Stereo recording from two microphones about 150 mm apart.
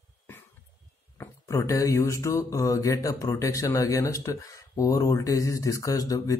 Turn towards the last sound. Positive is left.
turn(degrees=20)  # may be behind; listen again after turning